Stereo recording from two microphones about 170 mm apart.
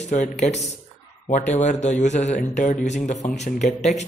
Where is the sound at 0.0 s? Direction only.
45° left (ahead or behind).